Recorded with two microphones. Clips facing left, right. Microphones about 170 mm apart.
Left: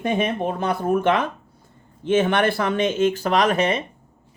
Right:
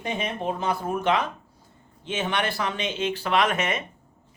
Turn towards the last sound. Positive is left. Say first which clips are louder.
# left 5 dB
turn(degrees=35)  # may be behind; listen again after turning